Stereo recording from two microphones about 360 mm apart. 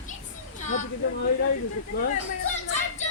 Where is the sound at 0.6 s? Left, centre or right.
Centre.